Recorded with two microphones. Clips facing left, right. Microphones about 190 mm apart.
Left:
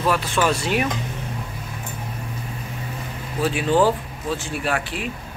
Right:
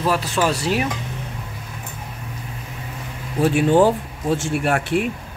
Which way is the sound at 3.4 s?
50° right (ahead or behind).